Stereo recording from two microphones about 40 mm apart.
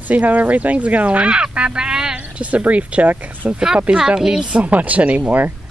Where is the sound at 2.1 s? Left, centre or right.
Right.